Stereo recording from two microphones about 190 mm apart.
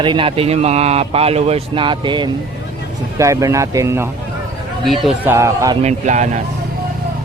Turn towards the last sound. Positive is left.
turn(degrees=-40)  # may be behind; listen again after turning